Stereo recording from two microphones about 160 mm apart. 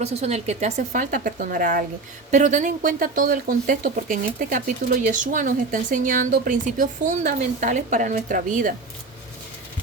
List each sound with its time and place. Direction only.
0.0 s speech: 40° right (ahead or behind); by 1.8 s 60° right (ahead or behind)
2.3 s speech: 50° right (ahead or behind)